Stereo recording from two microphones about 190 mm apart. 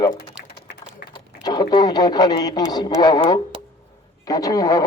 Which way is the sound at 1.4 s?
20° left (ahead or behind).